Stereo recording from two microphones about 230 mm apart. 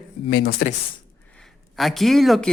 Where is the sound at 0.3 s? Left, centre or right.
Left.